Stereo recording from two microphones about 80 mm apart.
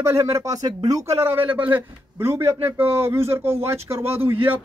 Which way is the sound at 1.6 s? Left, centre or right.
Right.